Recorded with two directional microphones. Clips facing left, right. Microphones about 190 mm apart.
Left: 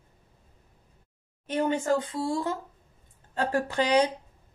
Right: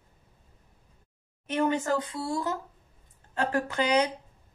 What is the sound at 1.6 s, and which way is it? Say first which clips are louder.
A woman's voice: left 2 dB; 30° left (ahead or behind).